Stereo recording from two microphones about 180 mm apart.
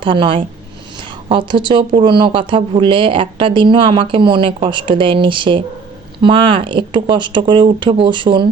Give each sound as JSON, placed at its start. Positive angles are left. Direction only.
{"t": 0.0, "sound": "speech", "side_deg": -30}